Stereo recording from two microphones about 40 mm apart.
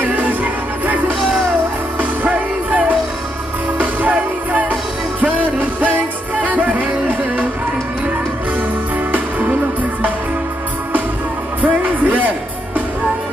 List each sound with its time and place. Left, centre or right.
0.0 s music: right
11.6 s music: right